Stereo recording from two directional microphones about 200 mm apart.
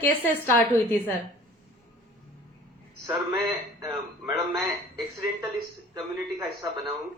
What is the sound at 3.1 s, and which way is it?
Speech, centre (ahead or behind).